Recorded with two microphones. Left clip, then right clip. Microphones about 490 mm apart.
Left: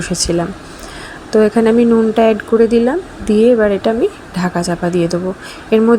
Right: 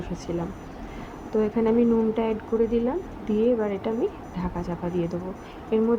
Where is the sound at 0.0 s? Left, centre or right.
Right.